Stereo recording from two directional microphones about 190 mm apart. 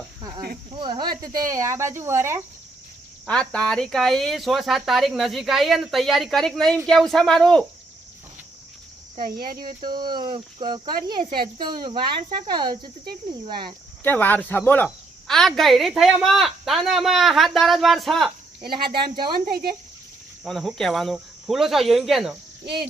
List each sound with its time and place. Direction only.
0.2 s speech: 20° right (ahead or behind)
3.2 s speech: 5° left (ahead or behind)
9.1 s speech: 50° right (ahead or behind)
9.6 s speech: 20° right (ahead or behind)
14.0 s speech: 10° left (ahead or behind)
18.6 s speech: 25° right (ahead or behind)
19.2 s speech: 55° right (ahead or behind)
20.4 s speech: centre (ahead or behind)